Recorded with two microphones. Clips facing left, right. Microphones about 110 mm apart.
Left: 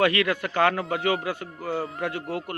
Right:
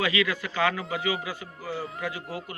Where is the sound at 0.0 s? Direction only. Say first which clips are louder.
Left 4 dB; 55° left (ahead or behind).